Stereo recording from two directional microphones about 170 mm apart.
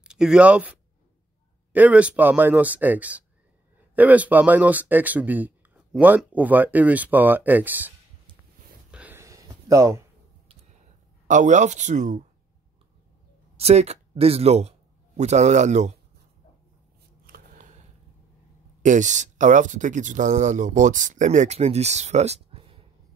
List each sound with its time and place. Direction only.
0.1 s speech: 5° right (ahead or behind)
8.9 s a sound: 10° right (ahead or behind)
11.2 s speech: 45° right (ahead or behind)
13.6 s speech: 40° right (ahead or behind)
17.3 s a sound: 50° right (ahead or behind)
18.8 s speech: 45° right (ahead or behind)